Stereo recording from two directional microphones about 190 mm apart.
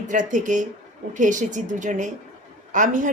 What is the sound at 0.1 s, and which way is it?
A woman's voice, 40° right (ahead or behind).